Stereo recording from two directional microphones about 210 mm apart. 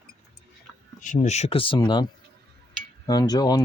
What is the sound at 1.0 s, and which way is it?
Speech, 35° left (ahead or behind).